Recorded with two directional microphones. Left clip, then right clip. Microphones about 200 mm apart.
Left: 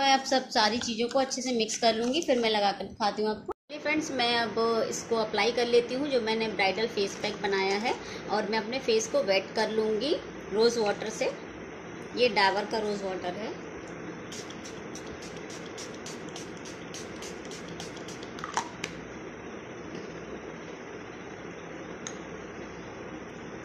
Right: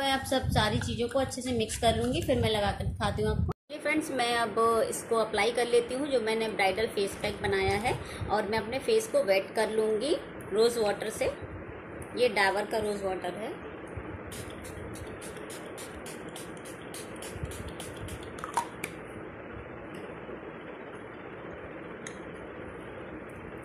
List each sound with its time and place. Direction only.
0.0 s a woman's voice: 15° left (ahead or behind)
3.4 s a woman's voice: 5° right (ahead or behind)